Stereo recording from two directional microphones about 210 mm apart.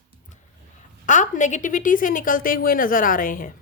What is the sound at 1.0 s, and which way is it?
A woman's voice, 35° left (ahead or behind).